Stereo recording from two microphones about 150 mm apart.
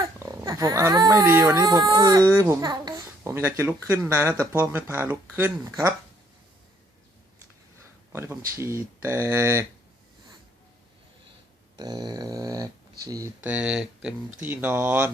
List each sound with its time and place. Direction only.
0.2 s a child's voice: 20° right (ahead or behind)
1.5 s a child's voice: 25° right (ahead or behind)
8.1 s speech: 15° right (ahead or behind)
11.8 s speech: 25° right (ahead or behind)
13.4 s a child's voice: 10° right (ahead or behind)